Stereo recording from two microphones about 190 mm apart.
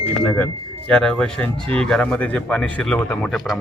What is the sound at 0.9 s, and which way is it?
Speech, 5° left (ahead or behind).